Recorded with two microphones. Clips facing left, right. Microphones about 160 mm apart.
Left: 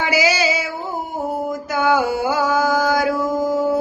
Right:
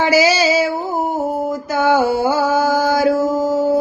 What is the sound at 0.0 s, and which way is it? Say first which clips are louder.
Female singing: right 5 dB; 35° right (ahead or behind).